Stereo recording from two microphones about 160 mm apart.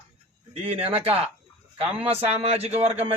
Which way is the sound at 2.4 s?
40° right (ahead or behind).